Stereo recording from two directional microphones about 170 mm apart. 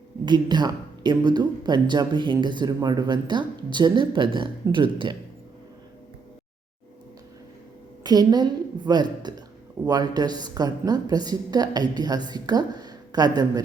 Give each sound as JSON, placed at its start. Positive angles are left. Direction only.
{"t": 0.3, "sound": "speech", "side_deg": -25}
{"t": 8.0, "sound": "speech", "side_deg": -25}